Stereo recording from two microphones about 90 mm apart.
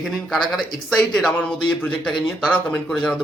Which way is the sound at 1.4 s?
15° left (ahead or behind).